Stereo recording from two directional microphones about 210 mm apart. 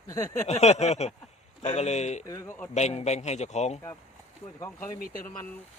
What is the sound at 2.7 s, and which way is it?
A man's voice, 30° left (ahead or behind).